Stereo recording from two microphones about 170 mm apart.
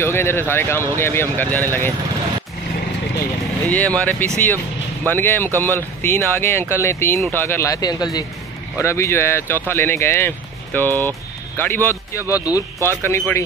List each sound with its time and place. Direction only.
0.0 s speech: 15° left (ahead or behind)
3.6 s speech: 10° left (ahead or behind)